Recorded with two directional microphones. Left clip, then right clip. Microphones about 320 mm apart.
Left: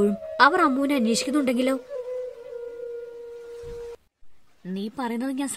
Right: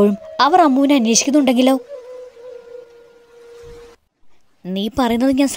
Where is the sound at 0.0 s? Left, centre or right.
Right.